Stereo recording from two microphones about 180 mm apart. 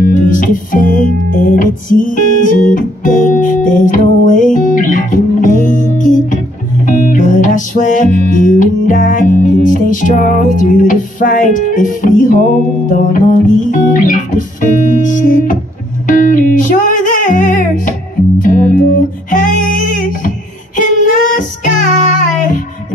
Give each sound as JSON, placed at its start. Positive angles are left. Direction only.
{"t": 0.4, "sound": "music", "side_deg": 50}
{"t": 20.7, "sound": "child singing", "side_deg": 45}